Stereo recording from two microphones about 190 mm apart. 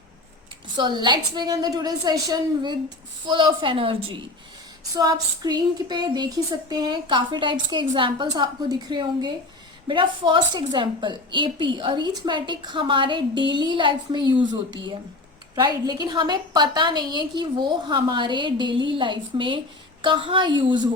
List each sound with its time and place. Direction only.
0.8 s speech: 25° right (ahead or behind)
15.5 s speech: 20° right (ahead or behind)